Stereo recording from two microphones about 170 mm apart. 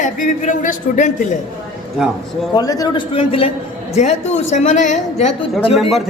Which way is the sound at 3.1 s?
35° left (ahead or behind).